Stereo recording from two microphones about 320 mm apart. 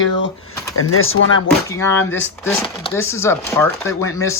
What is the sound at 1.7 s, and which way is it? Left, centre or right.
Speech, centre.